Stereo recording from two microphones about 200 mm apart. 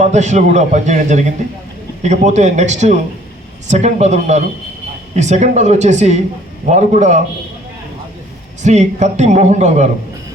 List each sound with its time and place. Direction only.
0.0 s a man's voice: 35° right (ahead or behind)
8.6 s a man's voice: 35° right (ahead or behind)